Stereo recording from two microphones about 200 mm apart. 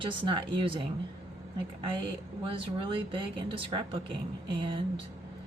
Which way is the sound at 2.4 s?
25° right (ahead or behind).